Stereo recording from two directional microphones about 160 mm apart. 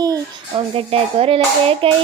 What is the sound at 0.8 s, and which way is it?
Speech, 35° right (ahead or behind).